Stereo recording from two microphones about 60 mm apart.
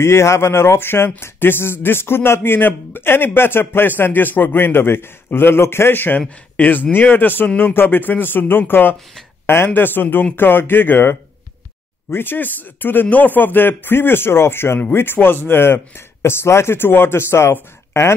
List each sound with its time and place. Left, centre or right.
0.0 s speech: left